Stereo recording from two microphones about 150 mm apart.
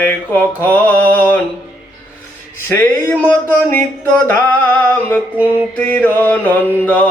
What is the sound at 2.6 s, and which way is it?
Mantra, 10° left (ahead or behind).